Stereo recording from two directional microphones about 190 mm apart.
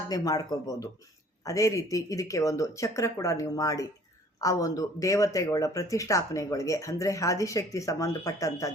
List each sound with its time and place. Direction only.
0.1 s speech: 20° left (ahead or behind)